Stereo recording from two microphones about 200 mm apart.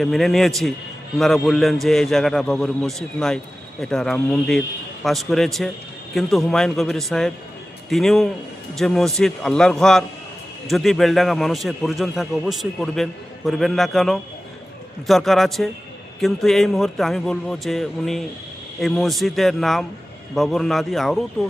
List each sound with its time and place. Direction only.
0.0 s a man's voice: centre (ahead or behind)